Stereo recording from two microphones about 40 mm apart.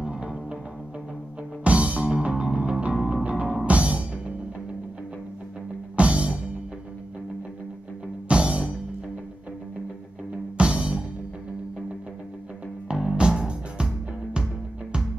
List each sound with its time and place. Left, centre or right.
0.0 s music: right
1.6 s music: right
5.9 s music: right
8.3 s music: right
10.6 s music: right
12.8 s music: centre